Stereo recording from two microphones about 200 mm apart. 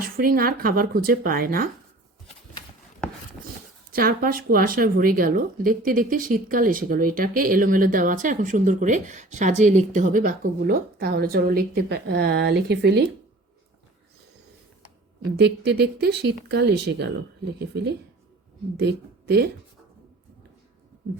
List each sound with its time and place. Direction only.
0.0 s speech: 45° right (ahead or behind)
3.9 s speech: 45° right (ahead or behind)
15.4 s speech: 55° right (ahead or behind)
18.8 s a woman's voice: 55° right (ahead or behind)